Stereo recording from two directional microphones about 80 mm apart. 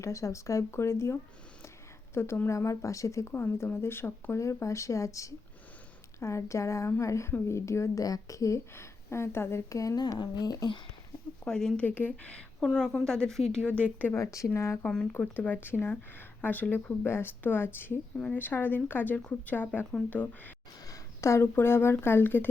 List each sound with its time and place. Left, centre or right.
0.0 s a woman's voice: left
3.3 s a woman's voice: left
10.0 s speech: left
11.4 s speech: centre
11.9 s speech: left
12.5 s speech: centre
14.1 s a woman's voice: left
15.1 s speech: left
20.8 s speech: left